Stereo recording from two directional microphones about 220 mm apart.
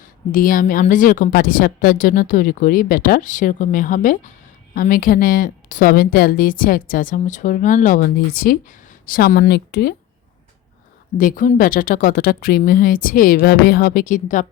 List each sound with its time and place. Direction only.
0.0 s a woman's voice: 40° left (ahead or behind)
11.2 s a woman's voice: 40° left (ahead or behind)